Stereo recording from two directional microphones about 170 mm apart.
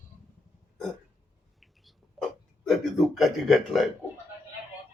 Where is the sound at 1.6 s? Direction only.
Centre (ahead or behind).